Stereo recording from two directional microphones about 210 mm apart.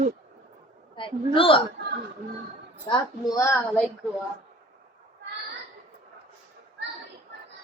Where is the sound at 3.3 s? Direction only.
10° left (ahead or behind).